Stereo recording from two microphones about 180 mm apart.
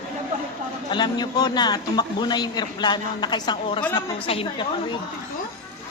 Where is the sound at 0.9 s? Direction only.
25° left (ahead or behind).